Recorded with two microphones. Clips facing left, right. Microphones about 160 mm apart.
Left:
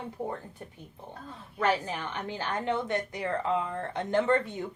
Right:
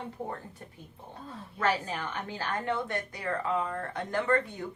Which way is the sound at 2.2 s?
20° left (ahead or behind).